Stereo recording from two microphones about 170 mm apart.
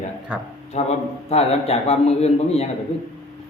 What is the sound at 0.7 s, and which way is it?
A man's voice, 40° left (ahead or behind).